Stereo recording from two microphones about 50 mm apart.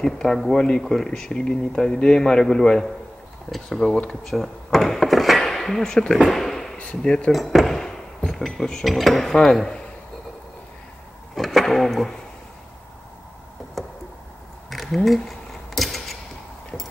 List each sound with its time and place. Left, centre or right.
0.0 s speech: centre
5.4 s a sound: centre
5.9 s speech: centre
6.3 s a sound: centre
6.8 s speech: left
7.3 s cutlery: centre
8.8 s speech: centre
11.3 s a sound: centre
14.7 s typewriter: centre